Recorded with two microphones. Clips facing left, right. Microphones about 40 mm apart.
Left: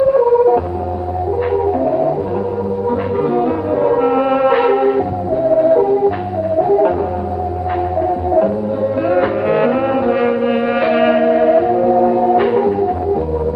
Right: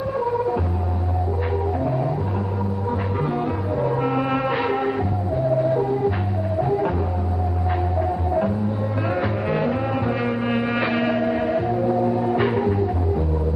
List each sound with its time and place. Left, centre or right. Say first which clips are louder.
0.2 s music: left 11 dB; left
1.8 s music: left 9 dB; left
3.2 s music: left 9 dB; centre
6.6 s music: left 9 dB; centre
9.1 s music: left 8 dB; left
10.1 s music: left 9 dB; left
10.4 s music: left 7 dB; centre
11.0 s music: left 9 dB; left
11.3 s music: left 10 dB; left